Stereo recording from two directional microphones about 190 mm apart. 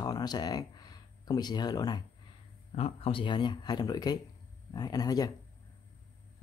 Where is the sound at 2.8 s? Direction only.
30° left (ahead or behind).